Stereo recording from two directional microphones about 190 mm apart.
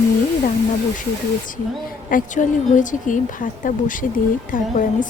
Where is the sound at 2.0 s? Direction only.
45° left (ahead or behind).